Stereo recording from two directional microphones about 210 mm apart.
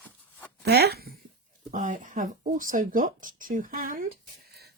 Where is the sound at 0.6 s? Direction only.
50° right (ahead or behind).